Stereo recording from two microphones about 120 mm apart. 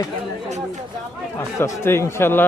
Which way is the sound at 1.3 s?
20° left (ahead or behind).